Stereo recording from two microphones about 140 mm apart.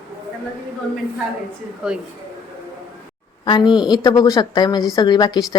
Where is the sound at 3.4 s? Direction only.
35° left (ahead or behind).